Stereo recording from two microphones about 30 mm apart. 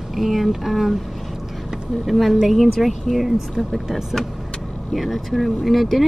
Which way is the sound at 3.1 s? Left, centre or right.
Centre.